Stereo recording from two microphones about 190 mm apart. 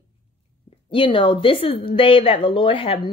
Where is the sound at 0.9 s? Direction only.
30° left (ahead or behind).